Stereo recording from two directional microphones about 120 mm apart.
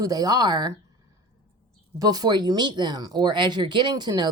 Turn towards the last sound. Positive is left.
turn(degrees=-35)  # may be behind; listen again after turning